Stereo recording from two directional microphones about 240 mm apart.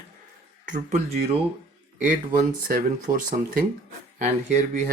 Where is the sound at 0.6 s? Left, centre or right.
Right.